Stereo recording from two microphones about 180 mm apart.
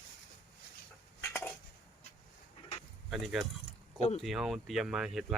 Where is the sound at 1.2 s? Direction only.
15° left (ahead or behind).